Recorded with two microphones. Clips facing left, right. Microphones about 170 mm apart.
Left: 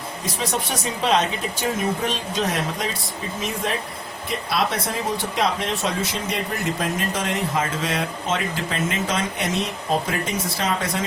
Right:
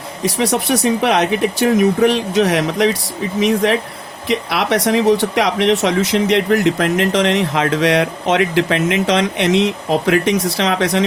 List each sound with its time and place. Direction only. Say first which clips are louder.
0.2 s speech: right 10 dB; 75° right (ahead or behind)